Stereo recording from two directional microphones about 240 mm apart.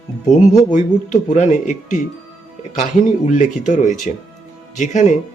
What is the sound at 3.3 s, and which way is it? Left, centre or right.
Speech, left.